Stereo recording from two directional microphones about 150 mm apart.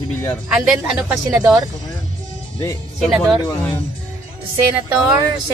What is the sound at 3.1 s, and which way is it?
Speech, 5° right (ahead or behind).